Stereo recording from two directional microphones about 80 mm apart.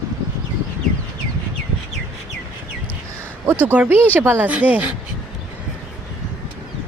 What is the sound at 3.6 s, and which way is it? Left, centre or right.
Speech, right.